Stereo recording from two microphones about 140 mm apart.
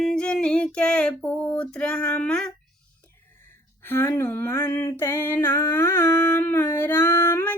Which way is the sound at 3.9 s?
15° left (ahead or behind).